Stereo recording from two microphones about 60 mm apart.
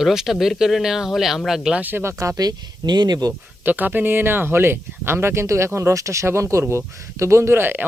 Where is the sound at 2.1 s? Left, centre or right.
Right.